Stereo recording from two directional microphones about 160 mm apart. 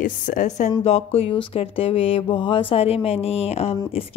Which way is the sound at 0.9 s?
40° left (ahead or behind).